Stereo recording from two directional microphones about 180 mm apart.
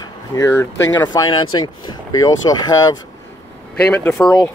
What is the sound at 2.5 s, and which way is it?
Speech, 20° left (ahead or behind).